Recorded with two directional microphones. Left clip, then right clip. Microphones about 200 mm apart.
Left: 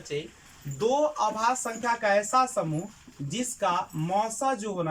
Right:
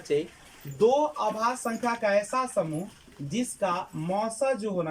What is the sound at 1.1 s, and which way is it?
Speech, 10° right (ahead or behind).